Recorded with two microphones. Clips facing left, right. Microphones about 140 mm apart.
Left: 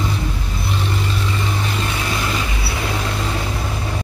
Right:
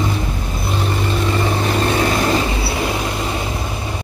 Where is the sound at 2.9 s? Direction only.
20° right (ahead or behind).